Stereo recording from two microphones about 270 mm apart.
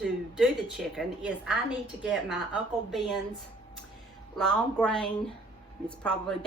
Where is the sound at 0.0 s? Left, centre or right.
Centre.